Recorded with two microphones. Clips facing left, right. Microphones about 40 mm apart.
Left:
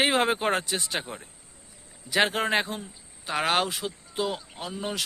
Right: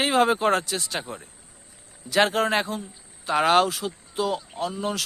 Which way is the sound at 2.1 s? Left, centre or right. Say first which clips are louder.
Right 3 dB; centre.